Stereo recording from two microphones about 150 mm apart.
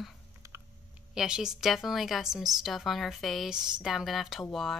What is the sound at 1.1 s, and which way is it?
A woman's voice, 5° right (ahead or behind).